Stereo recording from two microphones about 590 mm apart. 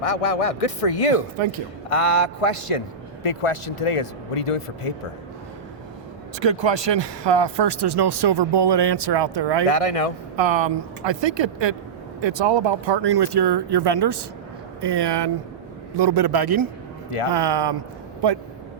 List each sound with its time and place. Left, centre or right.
0.0 s a man's voice: left
6.4 s speech: right
9.6 s a man's voice: left
10.3 s speech: right